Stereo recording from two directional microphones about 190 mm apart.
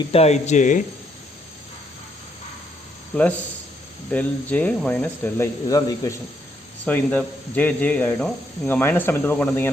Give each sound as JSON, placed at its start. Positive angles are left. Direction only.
{"t": 0.1, "sound": "speech", "side_deg": 35}
{"t": 3.1, "sound": "speech", "side_deg": 5}